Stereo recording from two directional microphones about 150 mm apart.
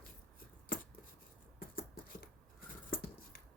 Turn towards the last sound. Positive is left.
turn(degrees=90)